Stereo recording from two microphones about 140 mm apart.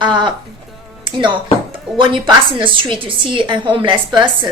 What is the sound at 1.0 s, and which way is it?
A woman's voice, 35° right (ahead or behind).